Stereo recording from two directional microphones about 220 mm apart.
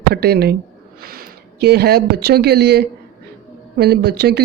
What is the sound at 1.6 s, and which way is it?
Speech, 45° right (ahead or behind).